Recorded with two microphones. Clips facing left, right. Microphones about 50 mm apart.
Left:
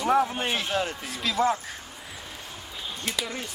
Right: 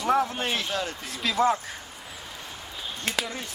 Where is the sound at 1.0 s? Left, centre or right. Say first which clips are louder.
Right 4 dB; centre.